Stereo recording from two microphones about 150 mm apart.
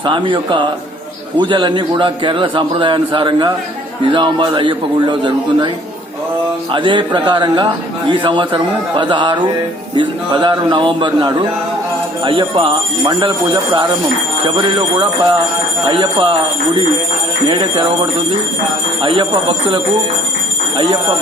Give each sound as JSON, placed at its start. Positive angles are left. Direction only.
{"t": 0.0, "sound": "a man's voice", "side_deg": -30}
{"t": 6.7, "sound": "a man's voice", "side_deg": -30}
{"t": 14.4, "sound": "a man's voice", "side_deg": -30}
{"t": 19.0, "sound": "a man's voice", "side_deg": -35}